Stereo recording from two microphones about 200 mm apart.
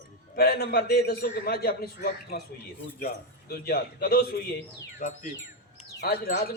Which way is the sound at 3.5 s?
50° left (ahead or behind).